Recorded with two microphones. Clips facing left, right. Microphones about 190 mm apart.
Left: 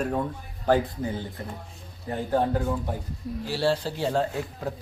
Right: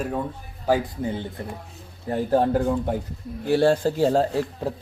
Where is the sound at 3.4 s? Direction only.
55° right (ahead or behind); by 4.4 s 35° right (ahead or behind).